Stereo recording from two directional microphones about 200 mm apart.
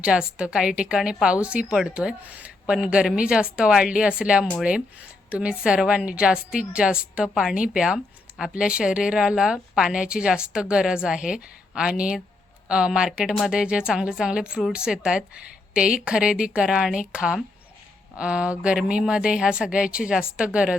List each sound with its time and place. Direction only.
0.0 s speech: 5° right (ahead or behind)